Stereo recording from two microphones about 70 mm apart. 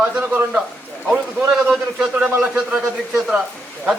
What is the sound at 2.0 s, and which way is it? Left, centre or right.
Speech, centre.